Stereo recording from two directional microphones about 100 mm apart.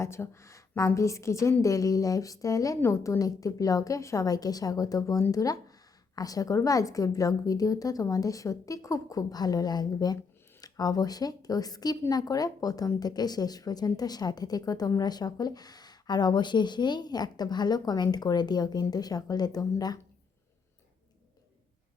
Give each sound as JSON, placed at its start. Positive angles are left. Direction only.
{"t": 0.0, "sound": "a woman's voice", "side_deg": 25}